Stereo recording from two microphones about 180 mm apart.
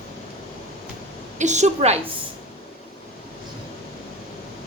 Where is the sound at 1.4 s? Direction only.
40° right (ahead or behind).